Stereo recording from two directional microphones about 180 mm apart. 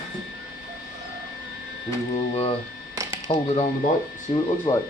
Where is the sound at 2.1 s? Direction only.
35° left (ahead or behind).